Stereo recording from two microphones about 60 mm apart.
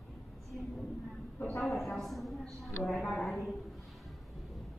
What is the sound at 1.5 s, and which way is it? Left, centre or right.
Speech, left.